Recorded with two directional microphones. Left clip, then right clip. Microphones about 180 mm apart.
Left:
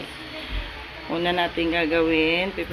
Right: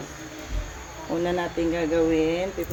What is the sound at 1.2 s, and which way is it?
Speech, centre (ahead or behind).